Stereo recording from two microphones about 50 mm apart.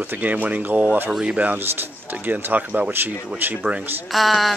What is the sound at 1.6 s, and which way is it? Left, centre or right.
Speech, right.